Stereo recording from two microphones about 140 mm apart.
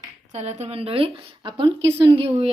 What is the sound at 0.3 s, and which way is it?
Speech, 55° right (ahead or behind).